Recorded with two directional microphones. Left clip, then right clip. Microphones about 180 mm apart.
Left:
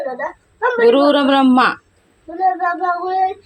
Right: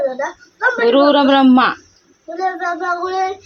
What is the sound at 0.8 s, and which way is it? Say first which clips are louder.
Speech: even; 5° left (ahead or behind).